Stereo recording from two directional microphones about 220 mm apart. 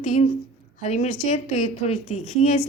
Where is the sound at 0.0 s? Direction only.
35° left (ahead or behind).